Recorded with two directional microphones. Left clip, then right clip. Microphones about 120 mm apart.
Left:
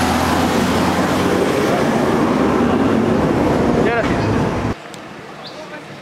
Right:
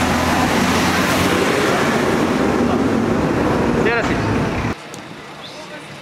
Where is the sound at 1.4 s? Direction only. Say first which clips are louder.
Even; 35° right (ahead or behind).